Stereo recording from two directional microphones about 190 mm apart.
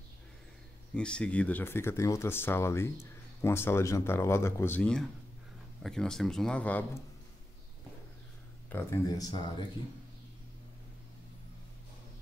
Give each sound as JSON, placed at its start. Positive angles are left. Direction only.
{"t": 0.9, "sound": "a man's voice", "side_deg": 5}
{"t": 8.6, "sound": "speech", "side_deg": 15}